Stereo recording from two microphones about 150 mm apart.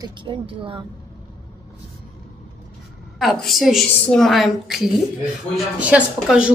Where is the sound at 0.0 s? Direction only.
30° right (ahead or behind).